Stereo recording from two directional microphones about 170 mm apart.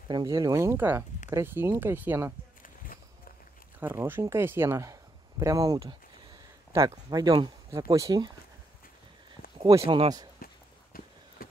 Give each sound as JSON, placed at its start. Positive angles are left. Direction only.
{"t": 0.1, "sound": "speech", "side_deg": -20}
{"t": 3.8, "sound": "speech", "side_deg": -15}
{"t": 9.6, "sound": "speech", "side_deg": -20}
{"t": 10.4, "sound": "run", "side_deg": 60}